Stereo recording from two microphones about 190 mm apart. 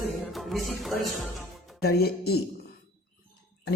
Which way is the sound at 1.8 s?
55° left (ahead or behind).